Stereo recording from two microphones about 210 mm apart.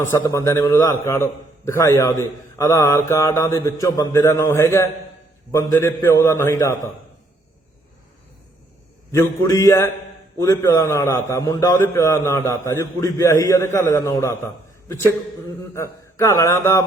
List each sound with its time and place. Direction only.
0.3 s a man's voice: 15° left (ahead or behind)
9.1 s a man's voice: 15° left (ahead or behind)
15.7 s a man's voice: 15° left (ahead or behind)